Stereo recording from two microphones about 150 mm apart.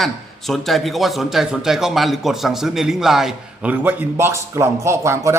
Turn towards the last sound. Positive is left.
turn(degrees=-20)  # may be behind; listen again after turning